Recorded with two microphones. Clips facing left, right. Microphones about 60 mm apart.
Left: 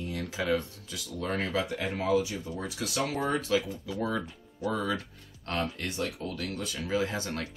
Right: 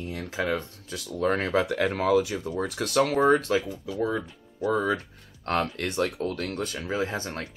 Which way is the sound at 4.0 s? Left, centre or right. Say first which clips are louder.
Right 4 dB; right.